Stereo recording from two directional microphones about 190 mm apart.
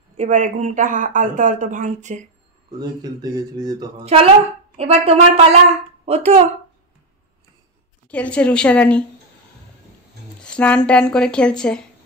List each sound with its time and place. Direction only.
0.2 s speech: 40° right (ahead or behind)
2.8 s speech: 20° right (ahead or behind)
4.0 s speech: 30° right (ahead or behind)
8.1 s a woman's voice: 5° left (ahead or behind)
10.4 s a sound: 5° left (ahead or behind)
10.9 s a woman's voice: 5° left (ahead or behind)